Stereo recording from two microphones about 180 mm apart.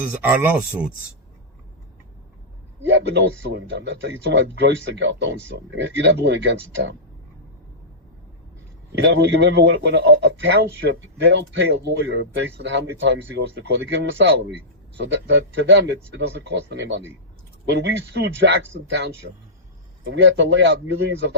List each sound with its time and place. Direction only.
0.2 s speech: 10° right (ahead or behind)
2.8 s a man's voice: 80° right
9.0 s a man's voice: 75° right (ahead or behind)
20.1 s a man's voice: 75° right (ahead or behind)